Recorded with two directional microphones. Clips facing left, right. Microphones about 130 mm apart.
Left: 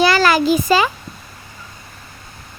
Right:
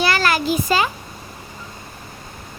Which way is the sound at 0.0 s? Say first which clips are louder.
Left 5 dB; 90° left.